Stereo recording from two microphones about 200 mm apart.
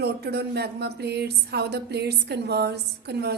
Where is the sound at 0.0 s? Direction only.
55° right (ahead or behind).